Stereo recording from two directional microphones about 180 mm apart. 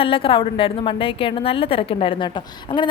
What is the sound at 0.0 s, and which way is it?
A woman's voice, 30° left (ahead or behind).